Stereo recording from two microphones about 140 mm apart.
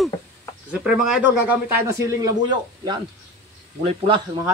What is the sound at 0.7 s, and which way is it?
A man's voice, 5° right (ahead or behind).